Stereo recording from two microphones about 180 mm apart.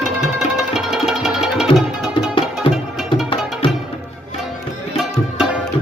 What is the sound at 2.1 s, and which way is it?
Music, 30° left (ahead or behind).